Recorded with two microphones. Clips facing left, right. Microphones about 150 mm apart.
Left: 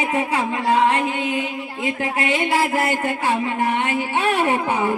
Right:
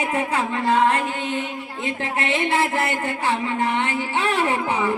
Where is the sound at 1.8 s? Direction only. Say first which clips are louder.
Left 3 dB; 10° left (ahead or behind).